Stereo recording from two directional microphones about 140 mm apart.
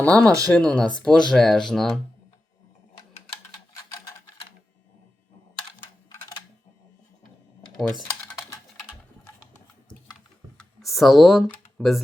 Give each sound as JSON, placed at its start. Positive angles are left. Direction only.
{"t": 0.0, "sound": "speech", "side_deg": 5}
{"t": 3.8, "sound": "mechanisms", "side_deg": 25}
{"t": 7.8, "sound": "typing", "side_deg": 5}
{"t": 10.6, "sound": "a sound", "side_deg": 0}